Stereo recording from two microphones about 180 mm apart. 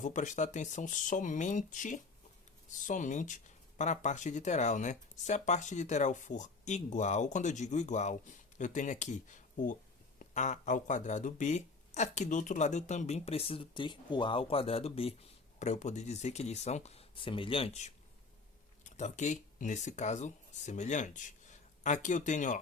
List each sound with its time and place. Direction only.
0.0 s speech: 45° left (ahead or behind)